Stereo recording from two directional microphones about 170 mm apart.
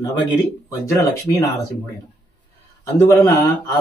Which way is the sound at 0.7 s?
20° left (ahead or behind).